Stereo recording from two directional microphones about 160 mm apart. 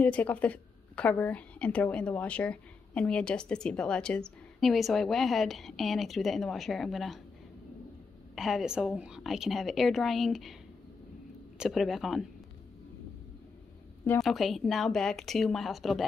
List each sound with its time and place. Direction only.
0.0 s a woman's voice: 10° left (ahead or behind)
8.4 s a woman's voice: centre (ahead or behind)
11.5 s a woman's voice: 5° right (ahead or behind)
14.2 s a woman's voice: centre (ahead or behind)